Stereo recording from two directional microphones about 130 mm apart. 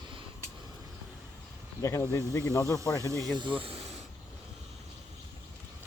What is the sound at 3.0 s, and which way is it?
Speech, 25° right (ahead or behind).